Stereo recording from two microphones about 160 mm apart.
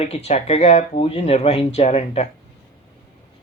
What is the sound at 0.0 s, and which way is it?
Speech, 40° left (ahead or behind).